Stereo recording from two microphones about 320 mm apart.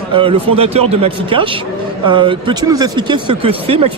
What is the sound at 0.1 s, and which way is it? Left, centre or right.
Speech, centre.